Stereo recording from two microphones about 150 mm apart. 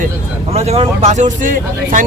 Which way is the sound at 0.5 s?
45° right (ahead or behind).